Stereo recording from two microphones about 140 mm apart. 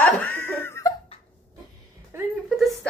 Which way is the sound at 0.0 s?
15° left (ahead or behind).